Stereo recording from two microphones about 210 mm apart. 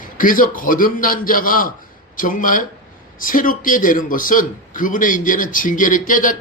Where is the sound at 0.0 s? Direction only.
40° left (ahead or behind).